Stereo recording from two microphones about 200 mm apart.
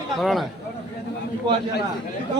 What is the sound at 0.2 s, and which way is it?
Speech, centre (ahead or behind).